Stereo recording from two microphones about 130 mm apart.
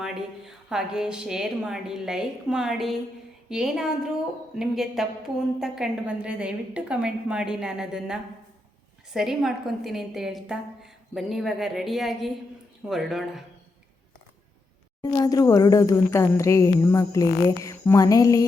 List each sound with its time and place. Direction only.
0.0 s a woman's voice: 5° right (ahead or behind)
15.0 s speech: 30° left (ahead or behind)